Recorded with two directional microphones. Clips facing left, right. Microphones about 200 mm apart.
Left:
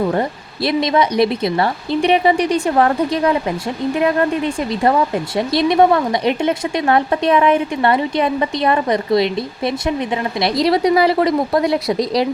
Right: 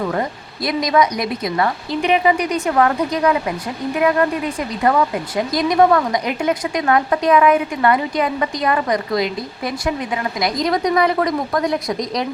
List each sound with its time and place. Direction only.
0.1 s speech: 30° left (ahead or behind)